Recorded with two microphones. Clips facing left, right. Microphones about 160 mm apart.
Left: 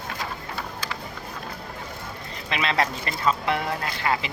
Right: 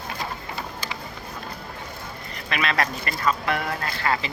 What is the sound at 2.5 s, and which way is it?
Speech, 25° left (ahead or behind).